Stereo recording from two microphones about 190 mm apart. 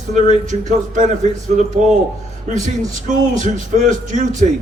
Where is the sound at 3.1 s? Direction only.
40° right (ahead or behind).